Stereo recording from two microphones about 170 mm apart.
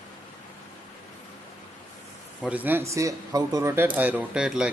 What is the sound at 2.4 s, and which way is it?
Speech, 10° right (ahead or behind).